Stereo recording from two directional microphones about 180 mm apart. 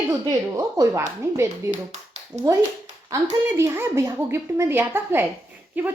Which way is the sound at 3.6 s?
15° right (ahead or behind).